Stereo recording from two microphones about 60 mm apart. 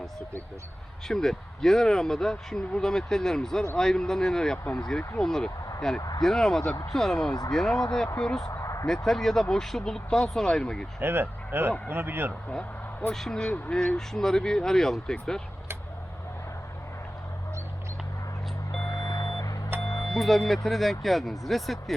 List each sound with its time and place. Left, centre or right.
1.0 s speech: centre
8.4 s a sound: left
9.0 s speech: centre
11.0 s speech: right
12.5 s speech: centre
18.9 s music: left
19.8 s music: left
20.1 s speech: centre